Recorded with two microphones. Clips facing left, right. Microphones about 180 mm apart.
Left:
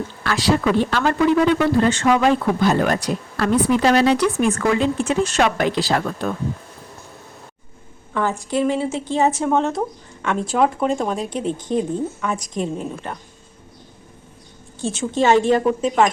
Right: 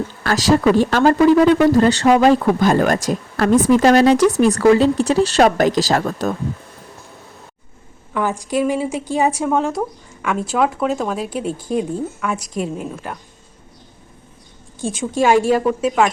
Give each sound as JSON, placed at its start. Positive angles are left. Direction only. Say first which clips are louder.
{"t": 0.2, "sound": "speech", "louder": "right 4 dB", "side_deg": -40}
{"t": 8.1, "sound": "a woman's voice", "louder": "right 1 dB", "side_deg": -15}
{"t": 14.8, "sound": "a woman's voice", "louder": "right 1 dB", "side_deg": -10}